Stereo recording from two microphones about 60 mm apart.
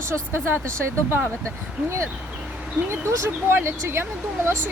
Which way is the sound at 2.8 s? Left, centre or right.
Right.